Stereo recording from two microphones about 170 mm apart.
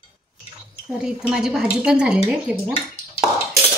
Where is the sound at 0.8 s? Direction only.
5° right (ahead or behind).